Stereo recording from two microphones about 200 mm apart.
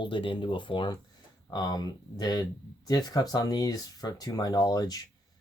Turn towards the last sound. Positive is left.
turn(degrees=20)  # may be behind; listen again after turning